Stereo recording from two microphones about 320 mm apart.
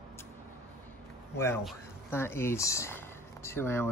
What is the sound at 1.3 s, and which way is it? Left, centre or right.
Speech, centre.